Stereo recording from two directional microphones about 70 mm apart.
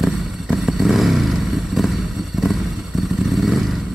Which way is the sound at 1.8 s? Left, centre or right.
Centre.